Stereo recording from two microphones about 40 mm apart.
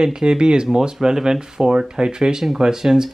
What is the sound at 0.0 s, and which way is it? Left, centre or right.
Speech, centre.